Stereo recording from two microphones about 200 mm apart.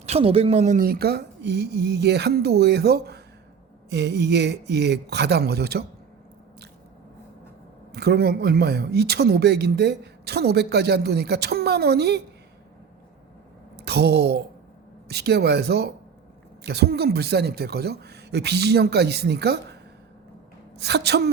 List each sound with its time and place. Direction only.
0.0 s speech: 30° right (ahead or behind); by 5.8 s 55° right (ahead or behind)
7.9 s speech: 55° right (ahead or behind)
13.7 s speech: 55° right (ahead or behind)
20.7 s speech: 55° right (ahead or behind)